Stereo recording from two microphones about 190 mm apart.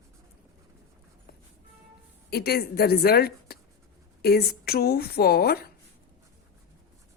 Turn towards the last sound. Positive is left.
turn(degrees=55)  # may be behind; listen again after turning